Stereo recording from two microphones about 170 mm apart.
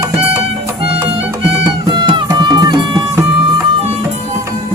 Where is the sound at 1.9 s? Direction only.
25° right (ahead or behind).